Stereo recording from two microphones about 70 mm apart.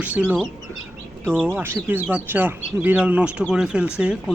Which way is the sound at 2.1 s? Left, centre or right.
Right.